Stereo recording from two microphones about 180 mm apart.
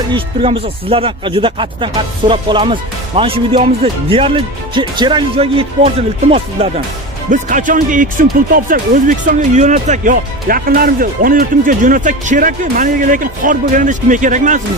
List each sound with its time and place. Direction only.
0.1 s speech: 30° right (ahead or behind)
7.2 s speech: 45° right (ahead or behind)